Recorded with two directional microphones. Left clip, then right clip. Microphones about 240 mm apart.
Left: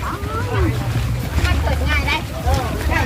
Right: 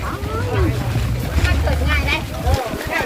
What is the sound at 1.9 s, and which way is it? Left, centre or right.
Vehicle, centre.